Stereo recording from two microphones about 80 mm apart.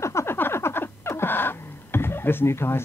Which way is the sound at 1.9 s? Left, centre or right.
Left.